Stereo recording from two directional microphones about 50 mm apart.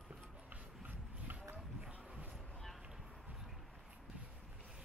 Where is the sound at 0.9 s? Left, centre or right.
Right.